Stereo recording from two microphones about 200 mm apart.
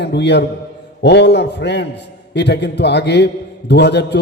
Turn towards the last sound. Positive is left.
turn(degrees=60)  # may be behind; listen again after turning